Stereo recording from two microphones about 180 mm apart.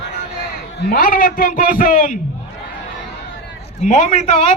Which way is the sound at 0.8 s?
50° left (ahead or behind).